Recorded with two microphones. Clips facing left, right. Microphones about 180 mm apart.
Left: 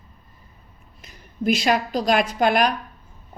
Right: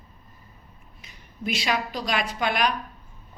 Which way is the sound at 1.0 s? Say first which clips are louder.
Left 8 dB; 45° left (ahead or behind).